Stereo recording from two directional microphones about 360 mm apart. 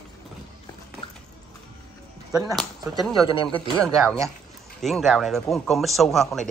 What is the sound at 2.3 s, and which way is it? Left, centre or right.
Speech, centre.